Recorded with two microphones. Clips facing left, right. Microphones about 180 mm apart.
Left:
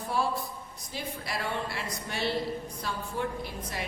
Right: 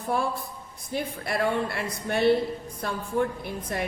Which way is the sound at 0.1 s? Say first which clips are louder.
Right 1 dB; 55° right (ahead or behind).